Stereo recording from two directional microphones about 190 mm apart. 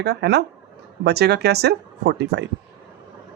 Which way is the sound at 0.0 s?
60° right (ahead or behind).